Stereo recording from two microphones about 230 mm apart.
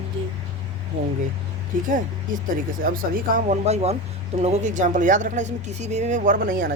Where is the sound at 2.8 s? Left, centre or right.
Right.